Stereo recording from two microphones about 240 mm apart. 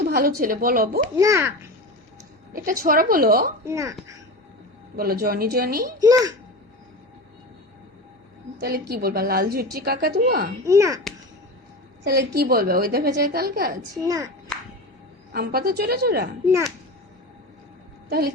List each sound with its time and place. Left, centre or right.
0.0 s speech: right
1.1 s a child's voice: centre
2.8 s speech: right
3.6 s a child's voice: centre
4.9 s speech: right
6.0 s a child's voice: centre
8.9 s speech: right
10.7 s a child's voice: centre
12.0 s speech: right
14.0 s a child's voice: centre
15.3 s speech: right
18.1 s speech: right